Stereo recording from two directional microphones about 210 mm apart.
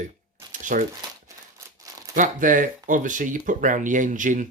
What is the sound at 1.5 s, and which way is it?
Crumpling, 15° right (ahead or behind).